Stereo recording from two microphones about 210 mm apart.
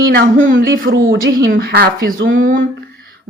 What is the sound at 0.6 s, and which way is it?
Speech, 45° right (ahead or behind).